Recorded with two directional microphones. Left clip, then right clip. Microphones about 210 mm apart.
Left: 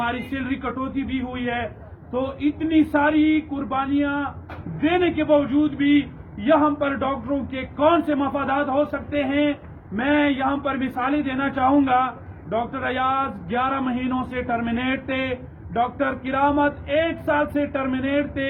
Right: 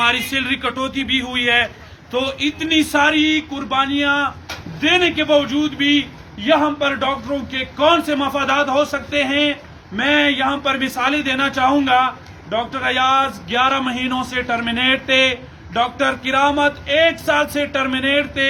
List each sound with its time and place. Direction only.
0.0 s a man's voice: 15° right (ahead or behind)